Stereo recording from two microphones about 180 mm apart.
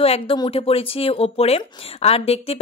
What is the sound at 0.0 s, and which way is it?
Speech, 30° left (ahead or behind).